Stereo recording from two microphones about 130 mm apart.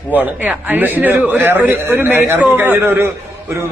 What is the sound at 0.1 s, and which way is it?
A man's voice, 15° right (ahead or behind).